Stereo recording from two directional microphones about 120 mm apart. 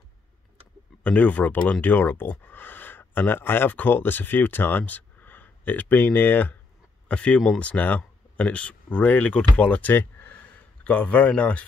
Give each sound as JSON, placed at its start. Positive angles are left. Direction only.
{"t": 1.0, "sound": "speech", "side_deg": 10}